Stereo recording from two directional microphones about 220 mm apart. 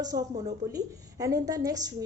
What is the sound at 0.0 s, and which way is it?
A woman's voice, 15° right (ahead or behind).